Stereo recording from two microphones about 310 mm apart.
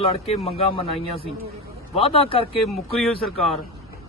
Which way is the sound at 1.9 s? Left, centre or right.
Centre.